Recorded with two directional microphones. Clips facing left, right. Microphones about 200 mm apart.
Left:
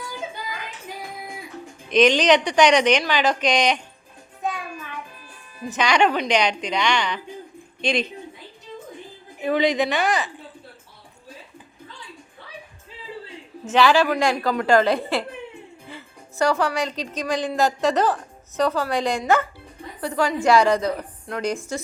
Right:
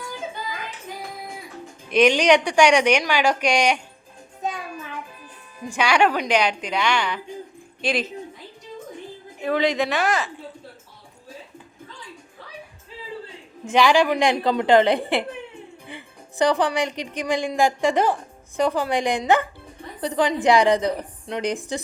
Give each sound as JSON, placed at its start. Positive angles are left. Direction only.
{"t": 1.9, "sound": "speech", "side_deg": -10}
{"t": 5.6, "sound": "speech", "side_deg": -10}
{"t": 9.4, "sound": "a woman's voice", "side_deg": 0}
{"t": 13.7, "sound": "a woman's voice", "side_deg": -15}